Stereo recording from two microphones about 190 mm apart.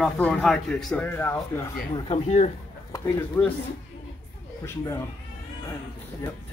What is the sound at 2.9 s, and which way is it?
Speech, 15° left (ahead or behind).